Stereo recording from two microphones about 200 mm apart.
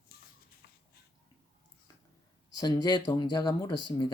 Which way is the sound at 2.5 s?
20° left (ahead or behind).